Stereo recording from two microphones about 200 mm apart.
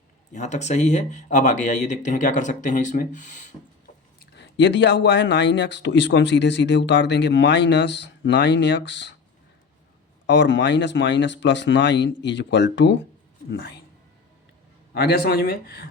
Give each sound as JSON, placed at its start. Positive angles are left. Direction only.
{"t": 0.3, "sound": "speech", "side_deg": 35}
{"t": 4.4, "sound": "a man's voice", "side_deg": 60}
{"t": 10.2, "sound": "a man's voice", "side_deg": 65}
{"t": 14.9, "sound": "speech", "side_deg": 50}